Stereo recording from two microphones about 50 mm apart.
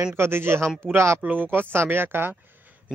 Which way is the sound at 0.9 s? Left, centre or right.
Right.